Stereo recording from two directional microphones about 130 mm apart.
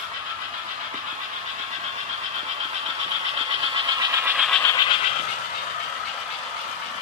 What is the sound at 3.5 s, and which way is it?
Vehicle, 45° right (ahead or behind).